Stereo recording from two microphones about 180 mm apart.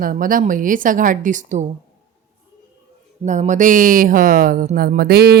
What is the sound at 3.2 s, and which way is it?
Speech, 40° right (ahead or behind).